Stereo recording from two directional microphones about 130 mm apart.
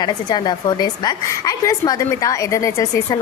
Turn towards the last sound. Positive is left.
turn(degrees=25)  # may be behind; listen again after turning